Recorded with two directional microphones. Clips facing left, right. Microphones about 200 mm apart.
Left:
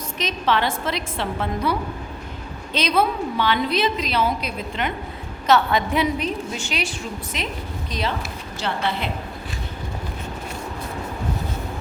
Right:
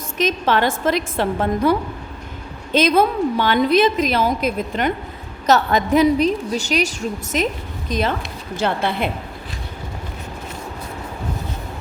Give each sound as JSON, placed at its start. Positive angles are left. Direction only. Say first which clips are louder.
{"t": 0.2, "sound": "a woman's voice", "louder": "right 4 dB", "side_deg": -50}
{"t": 2.7, "sound": "a woman's voice", "louder": "right 5 dB", "side_deg": -45}